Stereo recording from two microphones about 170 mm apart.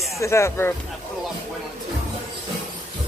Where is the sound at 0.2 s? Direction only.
15° left (ahead or behind).